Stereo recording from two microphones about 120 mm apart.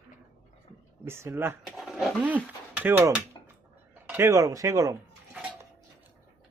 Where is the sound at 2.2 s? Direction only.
15° right (ahead or behind).